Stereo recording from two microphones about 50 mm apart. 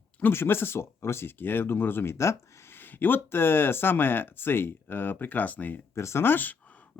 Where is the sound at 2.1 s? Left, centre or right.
Left.